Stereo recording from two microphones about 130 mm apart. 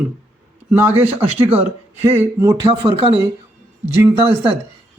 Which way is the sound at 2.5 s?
35° right (ahead or behind).